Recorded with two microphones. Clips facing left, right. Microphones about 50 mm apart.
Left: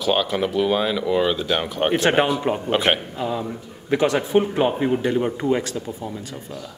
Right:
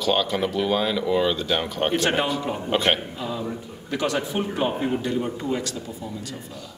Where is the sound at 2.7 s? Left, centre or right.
Centre.